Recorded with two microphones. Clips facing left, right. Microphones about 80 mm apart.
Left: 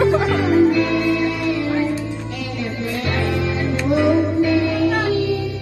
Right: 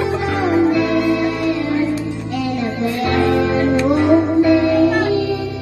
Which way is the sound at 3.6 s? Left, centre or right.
Right.